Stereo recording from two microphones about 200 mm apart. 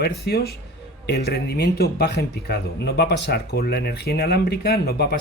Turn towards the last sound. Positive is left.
turn(degrees=55)  # may be behind; listen again after turning